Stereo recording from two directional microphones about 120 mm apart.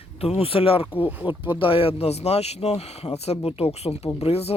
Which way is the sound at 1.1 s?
15° right (ahead or behind).